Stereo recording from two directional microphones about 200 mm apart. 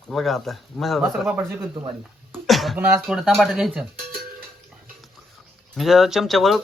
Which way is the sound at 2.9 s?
Centre (ahead or behind).